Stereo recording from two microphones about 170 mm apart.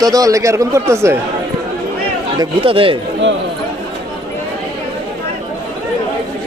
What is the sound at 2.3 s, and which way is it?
Speech, 30° right (ahead or behind).